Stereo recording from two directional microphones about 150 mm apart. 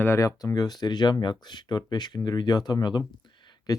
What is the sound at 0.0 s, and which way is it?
Speech, 15° left (ahead or behind).